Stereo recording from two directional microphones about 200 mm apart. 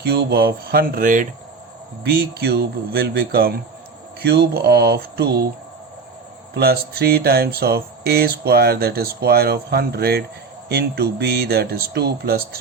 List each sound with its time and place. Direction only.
0.0 s speech: 50° right (ahead or behind)
6.5 s speech: 50° right (ahead or behind)